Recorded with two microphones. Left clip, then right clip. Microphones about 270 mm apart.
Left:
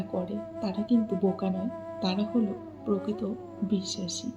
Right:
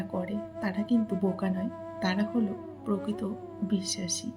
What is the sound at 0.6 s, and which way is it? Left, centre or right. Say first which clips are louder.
Music: even; right.